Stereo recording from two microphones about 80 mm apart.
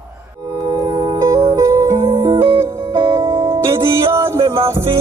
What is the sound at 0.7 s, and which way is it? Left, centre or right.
Music, right.